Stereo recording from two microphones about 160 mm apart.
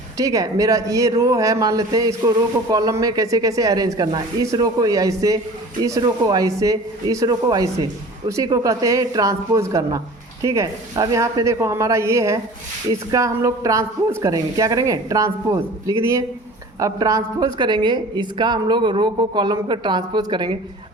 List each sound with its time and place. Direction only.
0.2 s speech: 20° right (ahead or behind)